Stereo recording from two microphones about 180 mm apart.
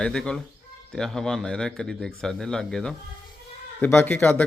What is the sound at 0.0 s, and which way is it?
Speech, 5° left (ahead or behind).